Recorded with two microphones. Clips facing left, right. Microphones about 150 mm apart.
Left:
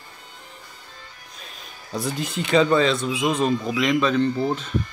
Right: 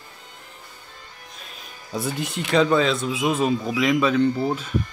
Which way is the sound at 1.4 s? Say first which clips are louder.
Left 1 dB; centre (ahead or behind).